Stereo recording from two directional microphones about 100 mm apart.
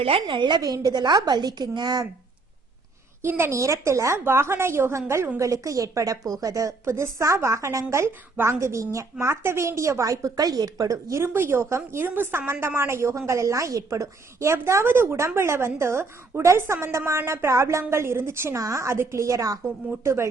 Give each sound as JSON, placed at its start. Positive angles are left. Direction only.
{"t": 0.0, "sound": "a woman's voice", "side_deg": -60}
{"t": 3.2, "sound": "a woman's voice", "side_deg": -25}